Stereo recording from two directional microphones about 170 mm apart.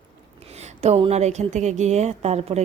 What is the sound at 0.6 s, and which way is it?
A woman's voice, 40° right (ahead or behind).